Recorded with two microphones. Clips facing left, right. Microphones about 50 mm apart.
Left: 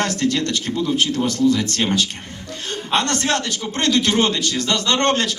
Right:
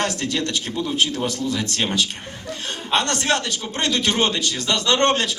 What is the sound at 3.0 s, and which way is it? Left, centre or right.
A man's voice, centre.